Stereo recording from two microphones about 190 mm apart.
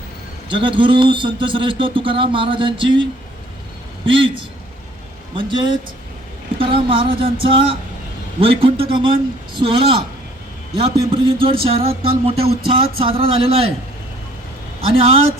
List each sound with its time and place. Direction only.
0.4 s a man's voice: 25° right (ahead or behind)
4.0 s a man's voice: 25° right (ahead or behind)
5.3 s a man's voice: 25° right (ahead or behind)